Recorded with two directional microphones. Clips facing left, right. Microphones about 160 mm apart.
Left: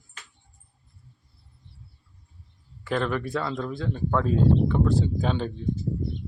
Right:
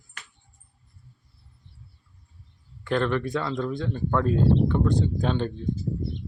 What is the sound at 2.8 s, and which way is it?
Speech, 5° left (ahead or behind).